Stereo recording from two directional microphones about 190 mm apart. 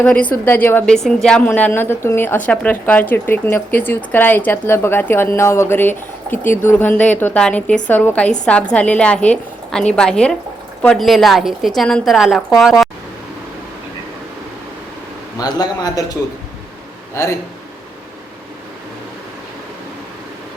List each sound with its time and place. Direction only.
0.0 s a woman's voice: 10° left (ahead or behind)
15.4 s a man's voice: 20° left (ahead or behind)
17.2 s a woman's voice: 15° left (ahead or behind)